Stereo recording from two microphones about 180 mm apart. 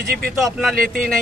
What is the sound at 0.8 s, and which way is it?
Speech, 50° right (ahead or behind).